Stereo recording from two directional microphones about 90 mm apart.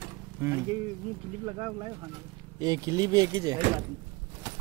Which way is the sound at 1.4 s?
50° right (ahead or behind).